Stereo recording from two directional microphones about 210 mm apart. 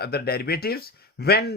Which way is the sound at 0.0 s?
50° left (ahead or behind).